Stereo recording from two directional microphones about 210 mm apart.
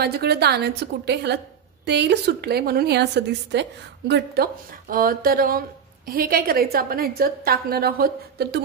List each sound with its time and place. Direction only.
0.0 s a woman's voice: 50° right (ahead or behind)